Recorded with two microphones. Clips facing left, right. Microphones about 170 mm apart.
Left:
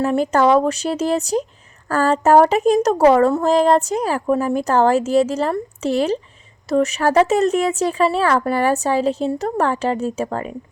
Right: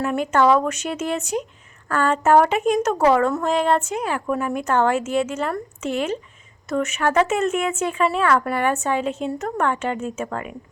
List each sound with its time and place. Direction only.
0.0 s speech: 35° left (ahead or behind)